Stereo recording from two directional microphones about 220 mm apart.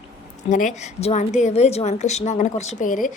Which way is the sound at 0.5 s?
30° left (ahead or behind).